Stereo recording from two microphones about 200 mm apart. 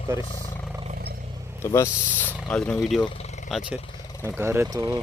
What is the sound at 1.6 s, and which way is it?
Speech, 15° left (ahead or behind).